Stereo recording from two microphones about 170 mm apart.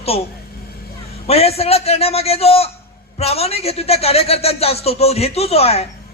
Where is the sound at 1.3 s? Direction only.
35° left (ahead or behind).